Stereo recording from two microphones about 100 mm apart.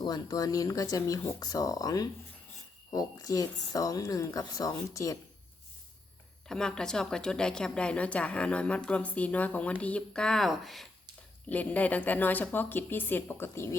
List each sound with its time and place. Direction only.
0.0 s speech: 40° left (ahead or behind)
6.5 s a woman's voice: 5° left (ahead or behind)
11.4 s speech: 15° left (ahead or behind)